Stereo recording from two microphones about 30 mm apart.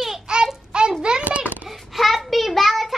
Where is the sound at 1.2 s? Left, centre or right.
Right.